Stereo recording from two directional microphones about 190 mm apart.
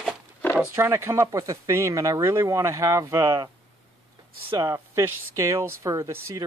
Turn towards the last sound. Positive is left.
turn(degrees=-15)  # may be behind; listen again after turning